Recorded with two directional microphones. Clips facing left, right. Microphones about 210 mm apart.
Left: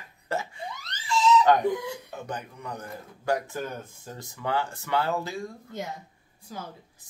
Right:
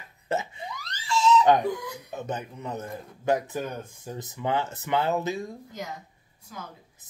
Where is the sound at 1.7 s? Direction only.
25° left (ahead or behind).